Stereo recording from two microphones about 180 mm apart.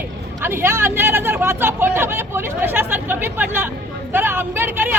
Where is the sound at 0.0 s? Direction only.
10° right (ahead or behind).